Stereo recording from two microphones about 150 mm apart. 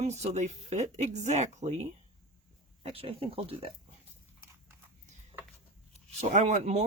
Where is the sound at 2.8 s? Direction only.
40° right (ahead or behind).